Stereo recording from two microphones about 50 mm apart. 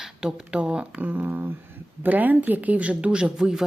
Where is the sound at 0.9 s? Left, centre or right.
Right; by 3.6 s centre.